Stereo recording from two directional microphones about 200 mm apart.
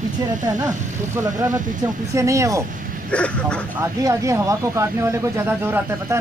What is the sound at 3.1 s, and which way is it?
Speech, 5° left (ahead or behind).